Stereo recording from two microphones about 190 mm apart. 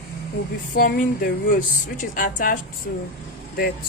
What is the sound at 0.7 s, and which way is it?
Speech, 50° left (ahead or behind).